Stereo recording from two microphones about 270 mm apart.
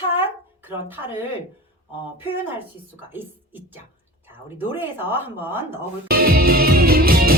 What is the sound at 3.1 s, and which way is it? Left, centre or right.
A woman's voice, centre.